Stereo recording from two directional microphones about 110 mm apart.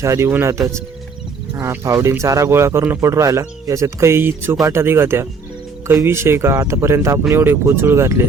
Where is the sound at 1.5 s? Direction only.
25° right (ahead or behind).